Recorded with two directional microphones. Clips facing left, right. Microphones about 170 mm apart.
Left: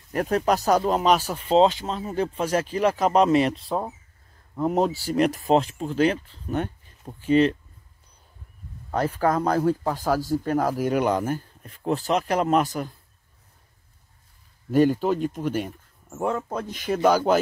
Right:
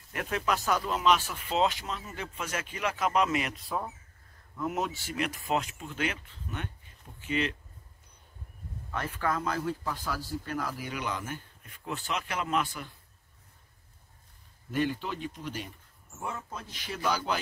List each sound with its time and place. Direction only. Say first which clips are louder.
0.1 s speech: left 9 dB; 40° left (ahead or behind)
8.9 s speech: left 9 dB; 35° left (ahead or behind)
14.7 s speech: left 11 dB; 40° left (ahead or behind)